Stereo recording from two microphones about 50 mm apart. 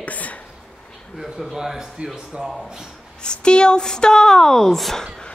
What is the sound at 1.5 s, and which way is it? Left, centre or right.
Speech, centre.